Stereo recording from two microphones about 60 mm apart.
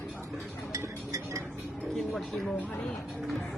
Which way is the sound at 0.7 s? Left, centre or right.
Right.